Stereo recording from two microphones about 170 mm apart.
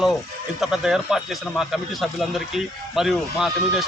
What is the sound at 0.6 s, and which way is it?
Speech, 5° right (ahead or behind).